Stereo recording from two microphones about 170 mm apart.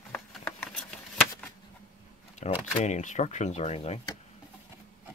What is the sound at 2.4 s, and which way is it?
Speech, 40° left (ahead or behind).